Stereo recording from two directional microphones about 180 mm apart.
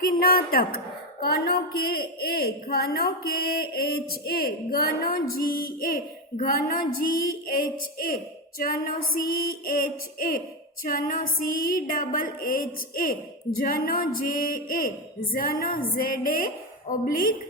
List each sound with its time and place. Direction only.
0.0 s a woman's voice: 55° left (ahead or behind)
8.5 s music: 55° left (ahead or behind)